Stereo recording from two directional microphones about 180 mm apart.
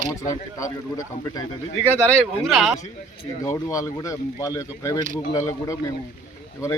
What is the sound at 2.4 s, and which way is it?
Speech, centre (ahead or behind).